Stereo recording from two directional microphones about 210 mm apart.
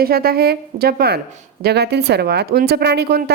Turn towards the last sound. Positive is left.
turn(degrees=-50)  # may be behind; listen again after turning